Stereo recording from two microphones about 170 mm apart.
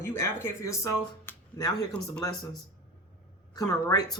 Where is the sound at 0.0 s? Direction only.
15° left (ahead or behind).